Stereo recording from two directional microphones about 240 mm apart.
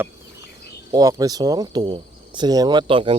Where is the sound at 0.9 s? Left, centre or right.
Centre.